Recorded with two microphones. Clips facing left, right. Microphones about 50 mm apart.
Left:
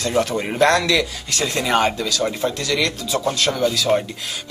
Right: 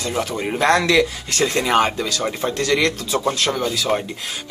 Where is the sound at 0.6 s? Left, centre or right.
Right.